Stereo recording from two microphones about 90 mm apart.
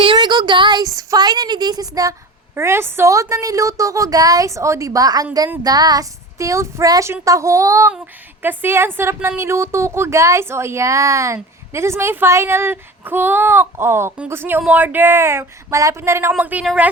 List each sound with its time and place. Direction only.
0.2 s a sound: 55° right (ahead or behind)
0.9 s a woman's voice: 45° right (ahead or behind)
2.6 s a woman's voice: 30° right (ahead or behind)
8.4 s a woman's voice: 25° right (ahead or behind)
16.4 s a woman's voice: 15° right (ahead or behind)